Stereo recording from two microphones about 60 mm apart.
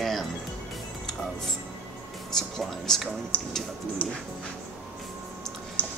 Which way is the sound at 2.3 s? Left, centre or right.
Centre.